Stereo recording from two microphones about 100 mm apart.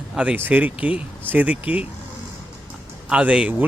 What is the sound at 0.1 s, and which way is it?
Speech, 10° right (ahead or behind).